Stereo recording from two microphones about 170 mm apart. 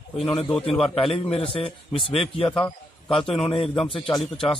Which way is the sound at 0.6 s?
35° left (ahead or behind).